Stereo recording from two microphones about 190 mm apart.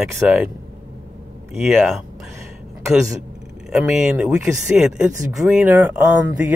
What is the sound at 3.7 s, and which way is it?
Speech, 5° right (ahead or behind).